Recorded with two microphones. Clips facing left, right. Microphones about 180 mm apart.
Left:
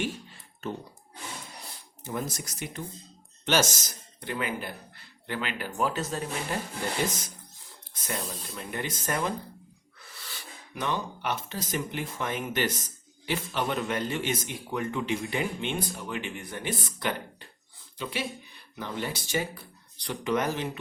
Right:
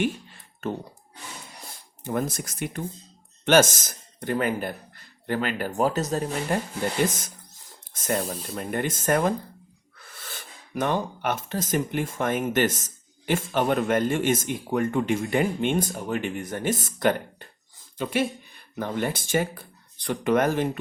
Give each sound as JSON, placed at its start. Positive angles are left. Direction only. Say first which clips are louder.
{"t": 2.0, "sound": "speech", "louder": "right 6 dB", "side_deg": -55}
{"t": 7.9, "sound": "speech", "louder": "right 8 dB", "side_deg": -50}